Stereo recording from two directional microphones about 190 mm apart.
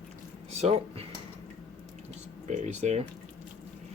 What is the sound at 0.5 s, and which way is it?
Speech, 35° right (ahead or behind).